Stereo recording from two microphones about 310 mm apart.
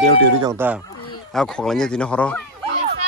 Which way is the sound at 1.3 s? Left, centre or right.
Centre.